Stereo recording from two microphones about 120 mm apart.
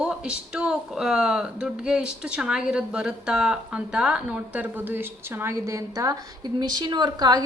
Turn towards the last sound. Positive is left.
turn(degrees=-35)  # may be behind; listen again after turning